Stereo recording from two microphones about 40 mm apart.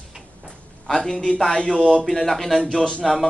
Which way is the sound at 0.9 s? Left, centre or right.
Centre.